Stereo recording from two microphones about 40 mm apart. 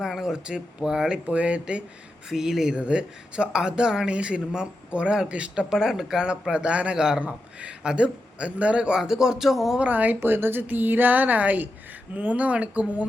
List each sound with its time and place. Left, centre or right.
0.0 s speech: centre
0.4 s speech: right
1.1 s speech: right
2.3 s speech: centre
2.7 s speech: right
5.6 s speech: centre
6.5 s speech: right
6.9 s speech: centre
7.2 s speech: right
9.0 s speech: centre
9.8 s a woman's voice: right
10.2 s a woman's voice: right